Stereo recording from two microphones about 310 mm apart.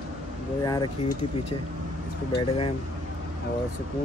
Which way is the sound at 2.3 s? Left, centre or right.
Centre.